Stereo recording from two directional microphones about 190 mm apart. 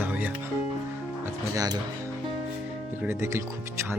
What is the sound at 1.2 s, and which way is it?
Music, 15° right (ahead or behind).